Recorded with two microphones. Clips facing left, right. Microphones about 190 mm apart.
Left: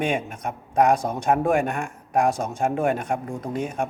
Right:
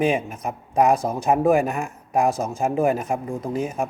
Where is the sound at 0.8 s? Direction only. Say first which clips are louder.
Right 1 dB; 5° right (ahead or behind).